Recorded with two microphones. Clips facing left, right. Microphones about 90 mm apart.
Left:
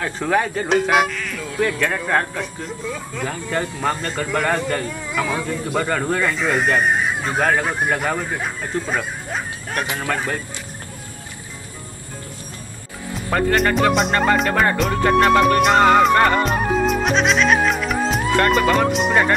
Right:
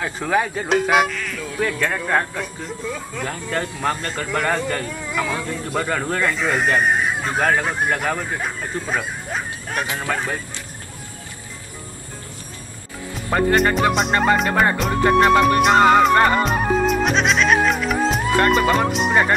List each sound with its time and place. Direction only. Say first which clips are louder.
0.0 s speech: left 1 dB; 5° right (ahead or behind)
13.3 s speech: right 1 dB; 20° right (ahead or behind)
13.9 s speech: even; centre (ahead or behind)
14.8 s music: even; centre (ahead or behind)